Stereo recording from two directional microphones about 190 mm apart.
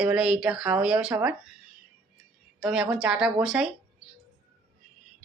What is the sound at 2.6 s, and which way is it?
Speech, 5° right (ahead or behind).